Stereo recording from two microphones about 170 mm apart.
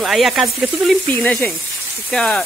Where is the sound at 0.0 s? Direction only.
Centre (ahead or behind).